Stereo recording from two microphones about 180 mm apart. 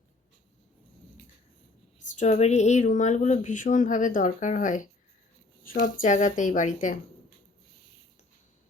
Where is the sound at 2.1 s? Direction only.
40° left (ahead or behind).